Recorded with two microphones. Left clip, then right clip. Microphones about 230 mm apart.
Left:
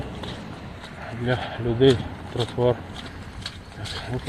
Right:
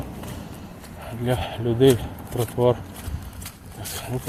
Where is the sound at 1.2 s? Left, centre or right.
Centre.